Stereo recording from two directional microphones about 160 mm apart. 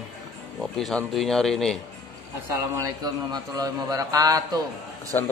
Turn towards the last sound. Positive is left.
turn(degrees=15)  # may be behind; listen again after turning